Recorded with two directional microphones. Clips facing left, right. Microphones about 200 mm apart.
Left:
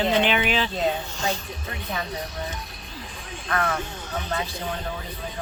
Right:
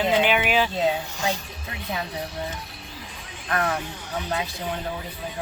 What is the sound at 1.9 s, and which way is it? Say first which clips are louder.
Speech: right 1 dB; 30° right (ahead or behind).